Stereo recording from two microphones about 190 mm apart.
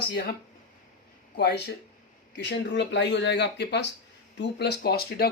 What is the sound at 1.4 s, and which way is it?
Speech, 60° left (ahead or behind).